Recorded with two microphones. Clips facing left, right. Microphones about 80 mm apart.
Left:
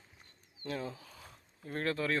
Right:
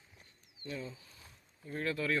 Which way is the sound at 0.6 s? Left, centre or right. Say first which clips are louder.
Left 4 dB; left.